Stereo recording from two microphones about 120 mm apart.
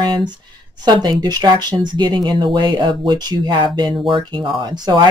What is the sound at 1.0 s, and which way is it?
Speech, 35° right (ahead or behind).